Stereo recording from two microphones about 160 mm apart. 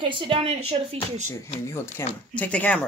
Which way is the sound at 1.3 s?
15° left (ahead or behind).